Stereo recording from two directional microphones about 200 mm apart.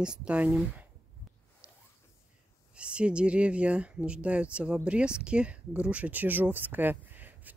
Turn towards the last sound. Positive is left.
turn(degrees=-10)  # may be behind; listen again after turning